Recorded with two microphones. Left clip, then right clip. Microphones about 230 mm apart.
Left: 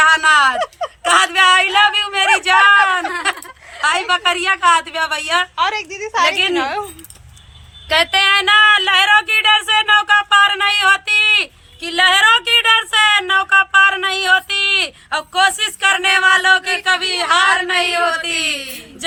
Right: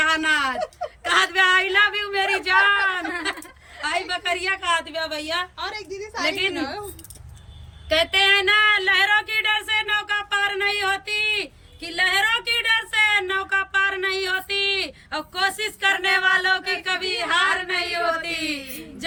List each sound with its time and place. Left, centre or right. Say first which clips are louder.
0.0 s a sound: left 9 dB; centre
6.2 s speech: left 7 dB; centre
6.5 s speech: left 10 dB; left
7.9 s speech: left 5 dB; centre